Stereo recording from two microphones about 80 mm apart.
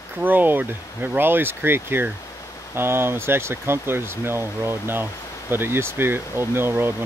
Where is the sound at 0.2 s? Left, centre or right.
Right.